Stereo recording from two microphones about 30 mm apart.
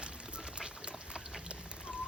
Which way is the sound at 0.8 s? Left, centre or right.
Right.